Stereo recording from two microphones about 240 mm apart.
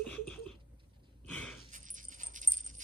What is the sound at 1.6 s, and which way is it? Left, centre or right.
Dog, right.